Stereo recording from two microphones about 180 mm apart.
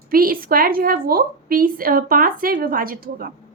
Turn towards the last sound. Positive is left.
turn(degrees=-55)  # may be behind; listen again after turning